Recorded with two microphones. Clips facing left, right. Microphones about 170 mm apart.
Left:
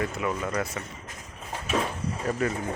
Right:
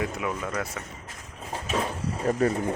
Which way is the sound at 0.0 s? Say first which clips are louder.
Left 1 dB; 5° right (ahead or behind).